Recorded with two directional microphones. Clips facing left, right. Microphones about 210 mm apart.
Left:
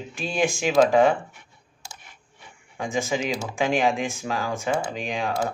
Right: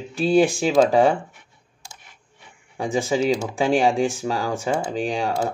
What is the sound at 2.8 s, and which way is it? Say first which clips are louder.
Speech: right 5 dB; 35° right (ahead or behind).